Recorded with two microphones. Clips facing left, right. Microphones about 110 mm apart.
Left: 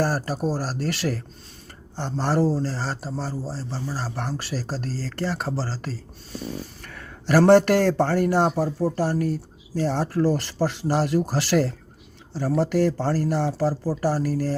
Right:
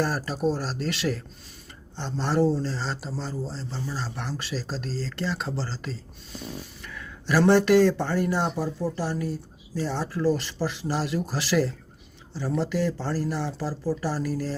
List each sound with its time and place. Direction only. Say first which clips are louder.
0.0 s speech: left 2 dB; 50° left (ahead or behind)